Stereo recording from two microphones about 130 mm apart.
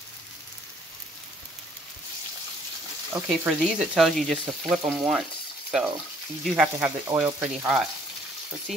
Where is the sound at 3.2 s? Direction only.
5° right (ahead or behind).